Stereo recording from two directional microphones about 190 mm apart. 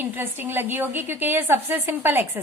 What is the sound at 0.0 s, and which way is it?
A woman's voice, 10° right (ahead or behind).